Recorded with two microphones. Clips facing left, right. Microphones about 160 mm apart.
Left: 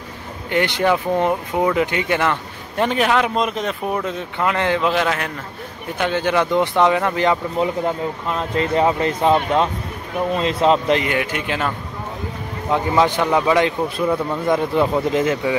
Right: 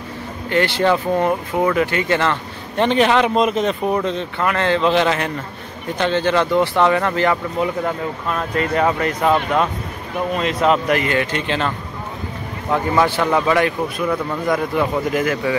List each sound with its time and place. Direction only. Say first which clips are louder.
0.5 s speech: right 1 dB; 15° left (ahead or behind)
12.7 s speech: even; 20° left (ahead or behind)